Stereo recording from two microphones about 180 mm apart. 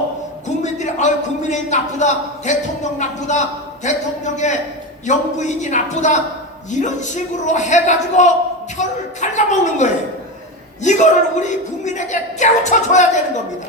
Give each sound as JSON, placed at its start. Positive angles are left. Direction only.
{"t": 0.4, "sound": "speech", "side_deg": 40}